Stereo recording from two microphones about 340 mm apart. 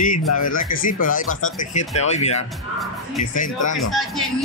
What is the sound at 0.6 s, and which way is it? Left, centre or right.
Speech, left.